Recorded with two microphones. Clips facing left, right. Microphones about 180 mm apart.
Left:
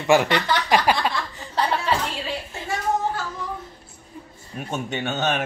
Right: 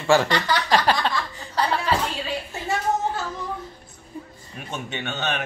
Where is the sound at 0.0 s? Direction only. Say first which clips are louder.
Left 1 dB; 15° left (ahead or behind).